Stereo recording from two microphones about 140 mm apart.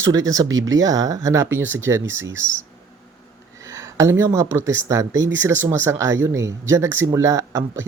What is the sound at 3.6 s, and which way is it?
Speech, 20° right (ahead or behind).